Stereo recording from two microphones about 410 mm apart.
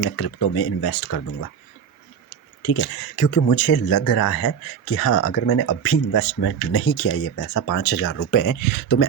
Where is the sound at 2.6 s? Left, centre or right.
Left.